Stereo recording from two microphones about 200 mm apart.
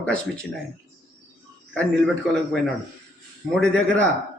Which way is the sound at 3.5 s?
5° left (ahead or behind).